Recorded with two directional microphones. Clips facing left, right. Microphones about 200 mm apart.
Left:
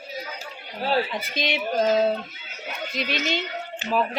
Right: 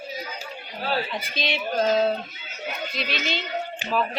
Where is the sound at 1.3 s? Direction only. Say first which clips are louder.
Left 1 dB; 15° left (ahead or behind).